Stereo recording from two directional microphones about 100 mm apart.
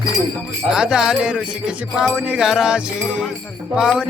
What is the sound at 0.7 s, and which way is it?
Music, 5° right (ahead or behind).